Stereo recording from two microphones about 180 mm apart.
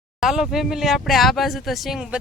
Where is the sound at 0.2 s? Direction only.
Centre (ahead or behind).